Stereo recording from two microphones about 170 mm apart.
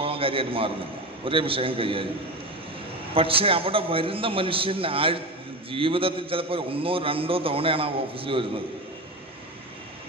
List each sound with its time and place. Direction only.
0.0 s a man's voice: 35° right (ahead or behind)
3.2 s a man's voice: 35° right (ahead or behind)